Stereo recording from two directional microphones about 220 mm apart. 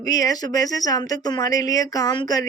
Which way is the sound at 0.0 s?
15° left (ahead or behind).